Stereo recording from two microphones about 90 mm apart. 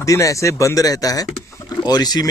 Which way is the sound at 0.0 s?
35° left (ahead or behind).